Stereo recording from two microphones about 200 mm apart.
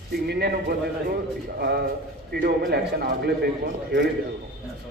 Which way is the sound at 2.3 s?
50° right (ahead or behind).